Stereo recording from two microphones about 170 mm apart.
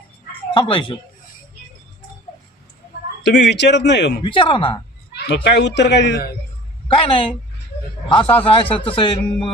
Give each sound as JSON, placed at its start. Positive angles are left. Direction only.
{"t": 0.5, "sound": "speech", "side_deg": 30}
{"t": 3.2, "sound": "a man's voice", "side_deg": 90}
{"t": 4.2, "sound": "speech", "side_deg": 30}
{"t": 5.3, "sound": "a man's voice", "side_deg": 90}
{"t": 6.8, "sound": "a woman's voice", "side_deg": 30}